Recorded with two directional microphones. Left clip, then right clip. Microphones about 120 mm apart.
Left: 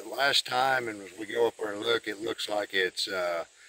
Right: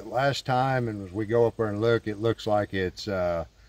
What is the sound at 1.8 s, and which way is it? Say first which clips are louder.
Speech: right 5 dB; 35° right (ahead or behind).